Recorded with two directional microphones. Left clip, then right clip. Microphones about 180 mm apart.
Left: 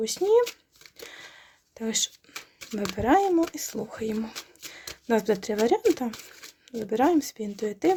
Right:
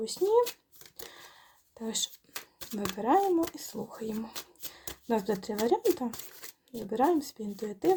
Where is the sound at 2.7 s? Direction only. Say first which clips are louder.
Left 4 dB; 35° left (ahead or behind).